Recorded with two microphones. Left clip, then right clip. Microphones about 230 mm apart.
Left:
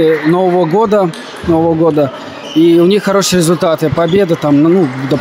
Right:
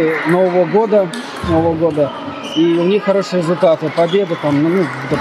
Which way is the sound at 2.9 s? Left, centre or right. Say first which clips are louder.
Left 3 dB; left.